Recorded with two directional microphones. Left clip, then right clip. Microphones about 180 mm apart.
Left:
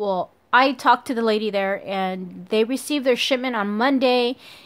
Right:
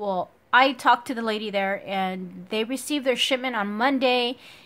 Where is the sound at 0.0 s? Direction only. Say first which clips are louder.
Left 4 dB; 30° left (ahead or behind).